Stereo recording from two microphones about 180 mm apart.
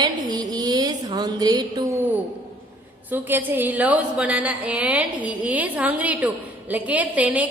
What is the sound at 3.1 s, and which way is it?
A woman's voice, 10° right (ahead or behind).